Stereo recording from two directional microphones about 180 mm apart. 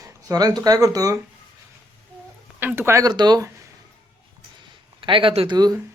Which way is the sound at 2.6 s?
15° right (ahead or behind).